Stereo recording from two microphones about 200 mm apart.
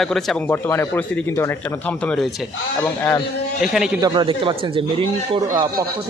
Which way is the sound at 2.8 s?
10° left (ahead or behind).